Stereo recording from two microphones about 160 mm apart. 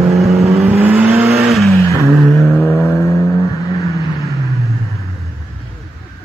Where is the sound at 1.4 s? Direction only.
Centre (ahead or behind).